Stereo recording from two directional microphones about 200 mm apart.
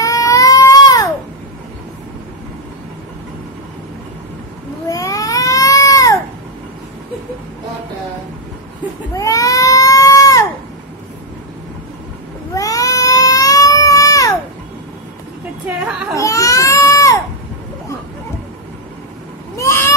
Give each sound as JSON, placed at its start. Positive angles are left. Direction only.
{"t": 0.0, "sound": "baby cry", "side_deg": 15}
{"t": 4.8, "sound": "baby cry", "side_deg": 15}
{"t": 9.1, "sound": "baby cry", "side_deg": 15}
{"t": 12.5, "sound": "cat", "side_deg": 15}
{"t": 15.6, "sound": "a sound", "side_deg": -5}
{"t": 16.2, "sound": "baby cry", "side_deg": 15}
{"t": 19.5, "sound": "a sound", "side_deg": 15}